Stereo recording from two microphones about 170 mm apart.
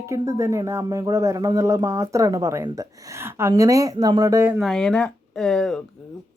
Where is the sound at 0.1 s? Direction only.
20° right (ahead or behind).